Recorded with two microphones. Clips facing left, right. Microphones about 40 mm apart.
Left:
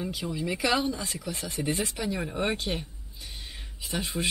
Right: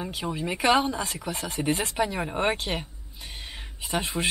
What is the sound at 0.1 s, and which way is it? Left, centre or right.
Speech, right.